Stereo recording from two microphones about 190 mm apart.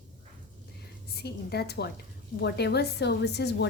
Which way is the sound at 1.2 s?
55° left (ahead or behind).